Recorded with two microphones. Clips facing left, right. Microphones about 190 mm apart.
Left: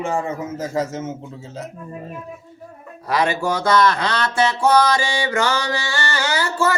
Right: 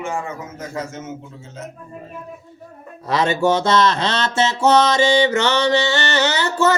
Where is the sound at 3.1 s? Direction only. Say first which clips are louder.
Right 3 dB; 25° right (ahead or behind).